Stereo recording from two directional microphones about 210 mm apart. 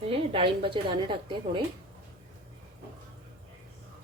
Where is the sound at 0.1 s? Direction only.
25° right (ahead or behind).